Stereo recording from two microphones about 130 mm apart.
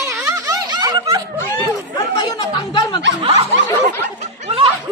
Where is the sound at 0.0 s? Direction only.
20° right (ahead or behind).